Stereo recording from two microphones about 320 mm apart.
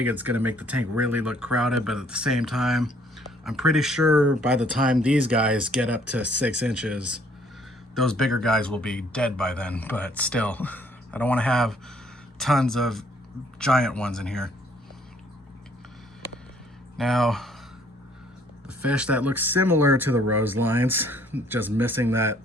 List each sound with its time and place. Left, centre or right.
0.0 s speech: centre
17.0 s speech: centre
18.8 s speech: centre